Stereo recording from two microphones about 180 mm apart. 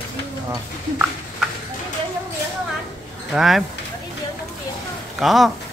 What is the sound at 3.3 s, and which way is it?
Speech, centre (ahead or behind).